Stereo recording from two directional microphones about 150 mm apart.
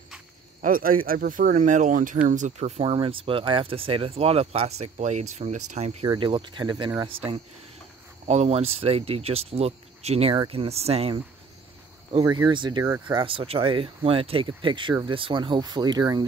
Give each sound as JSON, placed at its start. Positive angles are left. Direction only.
{"t": 0.6, "sound": "speech", "side_deg": -70}
{"t": 6.0, "sound": "speech", "side_deg": -35}
{"t": 12.1, "sound": "speech", "side_deg": -25}